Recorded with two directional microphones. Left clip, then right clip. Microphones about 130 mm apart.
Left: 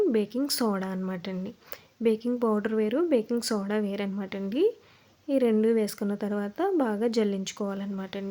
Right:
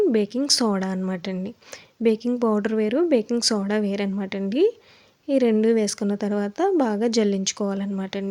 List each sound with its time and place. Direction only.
0.0 s a woman's voice: 25° right (ahead or behind)